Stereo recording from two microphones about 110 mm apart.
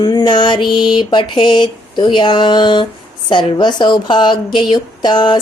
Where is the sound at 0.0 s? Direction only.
40° left (ahead or behind).